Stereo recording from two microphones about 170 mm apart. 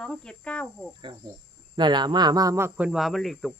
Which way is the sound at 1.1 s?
35° right (ahead or behind).